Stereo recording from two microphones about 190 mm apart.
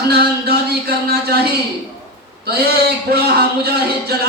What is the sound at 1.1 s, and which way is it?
Speech, 55° right (ahead or behind).